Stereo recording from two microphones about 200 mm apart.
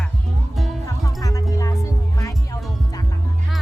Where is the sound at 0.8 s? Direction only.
15° left (ahead or behind).